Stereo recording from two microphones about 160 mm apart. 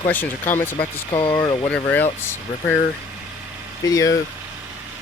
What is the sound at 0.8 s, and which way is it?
Speech, 30° left (ahead or behind).